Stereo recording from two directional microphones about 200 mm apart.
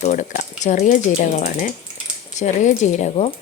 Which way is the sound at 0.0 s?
35° left (ahead or behind).